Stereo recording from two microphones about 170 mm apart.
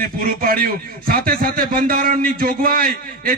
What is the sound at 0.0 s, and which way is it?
A man's voice, 55° right (ahead or behind).